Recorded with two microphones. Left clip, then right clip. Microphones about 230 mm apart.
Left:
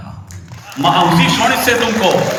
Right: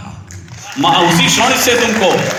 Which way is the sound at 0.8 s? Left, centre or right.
Right.